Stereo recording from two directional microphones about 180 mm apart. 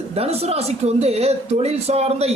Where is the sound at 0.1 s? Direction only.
35° right (ahead or behind).